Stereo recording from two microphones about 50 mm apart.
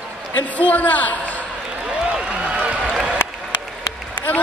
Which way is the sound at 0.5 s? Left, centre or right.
Left.